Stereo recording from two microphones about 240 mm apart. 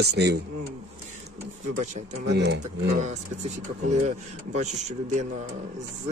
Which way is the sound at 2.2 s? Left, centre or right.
Right.